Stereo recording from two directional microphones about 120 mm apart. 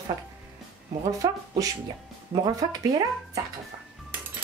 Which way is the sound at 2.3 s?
35° right (ahead or behind).